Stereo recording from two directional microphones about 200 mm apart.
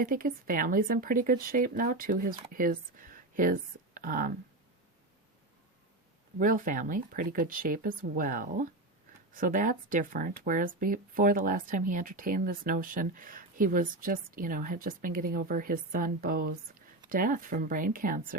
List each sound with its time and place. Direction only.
0.0 s speech: 45° right (ahead or behind)
6.4 s speech: 40° right (ahead or behind)